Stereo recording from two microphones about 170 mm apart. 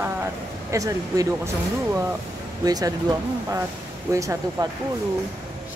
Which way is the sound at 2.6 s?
20° right (ahead or behind).